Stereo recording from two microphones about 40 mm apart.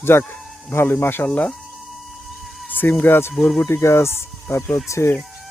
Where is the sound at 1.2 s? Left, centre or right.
Left.